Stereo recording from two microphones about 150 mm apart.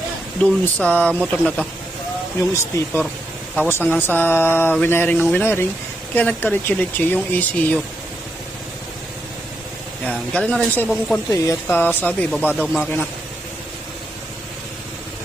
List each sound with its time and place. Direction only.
0.6 s speech: 10° left (ahead or behind)
2.4 s speech: 20° left (ahead or behind)
10.1 s speech: 5° left (ahead or behind)
11.3 s speech: 15° left (ahead or behind)
12.6 s speech: centre (ahead or behind)